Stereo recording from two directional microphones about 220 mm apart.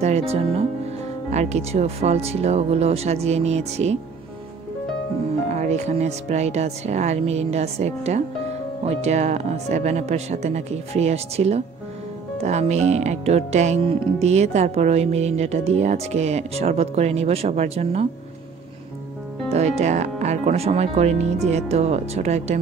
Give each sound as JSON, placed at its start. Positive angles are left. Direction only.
{"t": 0.0, "sound": "speech", "side_deg": -30}
{"t": 5.5, "sound": "speech", "side_deg": -30}
{"t": 19.5, "sound": "speech", "side_deg": -30}